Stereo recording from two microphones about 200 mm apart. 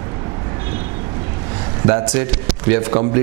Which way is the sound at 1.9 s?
25° right (ahead or behind).